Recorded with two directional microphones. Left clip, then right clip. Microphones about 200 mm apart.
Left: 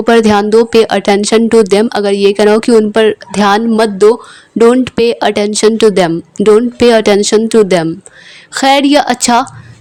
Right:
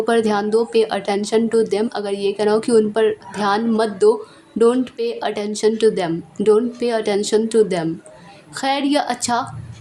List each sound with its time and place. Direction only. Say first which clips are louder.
0.0 s speech: left 9 dB; 35° left (ahead or behind)